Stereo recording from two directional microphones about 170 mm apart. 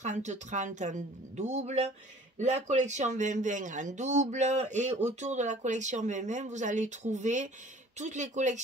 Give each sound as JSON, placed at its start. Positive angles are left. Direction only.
{"t": 0.0, "sound": "speech", "side_deg": -45}